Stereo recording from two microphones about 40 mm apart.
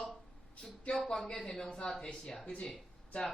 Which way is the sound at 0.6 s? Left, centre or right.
Centre.